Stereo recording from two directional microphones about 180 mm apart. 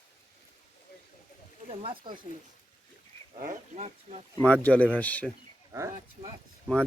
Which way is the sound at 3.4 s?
45° right (ahead or behind).